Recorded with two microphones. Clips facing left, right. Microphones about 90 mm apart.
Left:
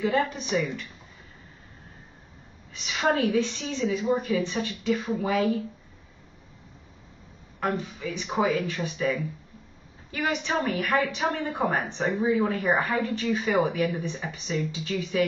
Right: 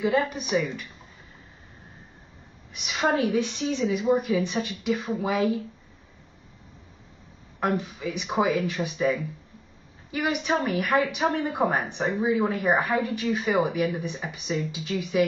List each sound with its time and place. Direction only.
0.0 s speech: 10° right (ahead or behind)
2.7 s speech: 15° right (ahead or behind)
7.6 s speech: 15° right (ahead or behind)